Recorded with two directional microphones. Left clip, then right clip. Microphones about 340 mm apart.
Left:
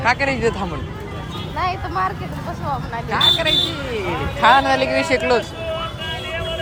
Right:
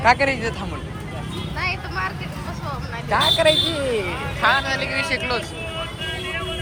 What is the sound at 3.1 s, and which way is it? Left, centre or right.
Speech, centre.